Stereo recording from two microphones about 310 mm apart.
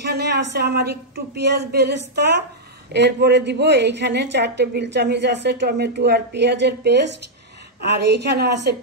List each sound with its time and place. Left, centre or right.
0.0 s a woman's voice: right